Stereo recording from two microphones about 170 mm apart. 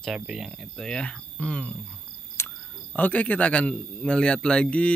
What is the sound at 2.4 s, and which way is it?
Cricket, 15° left (ahead or behind).